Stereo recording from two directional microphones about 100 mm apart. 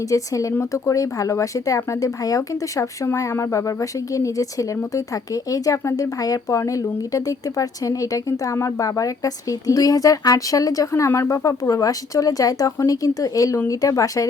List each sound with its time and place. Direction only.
0.0 s speech: 35° left (ahead or behind)